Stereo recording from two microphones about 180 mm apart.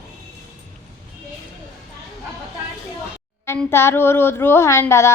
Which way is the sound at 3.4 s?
15° left (ahead or behind).